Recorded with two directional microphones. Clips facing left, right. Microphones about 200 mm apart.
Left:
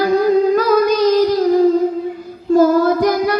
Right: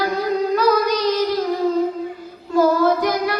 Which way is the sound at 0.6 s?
45° left (ahead or behind).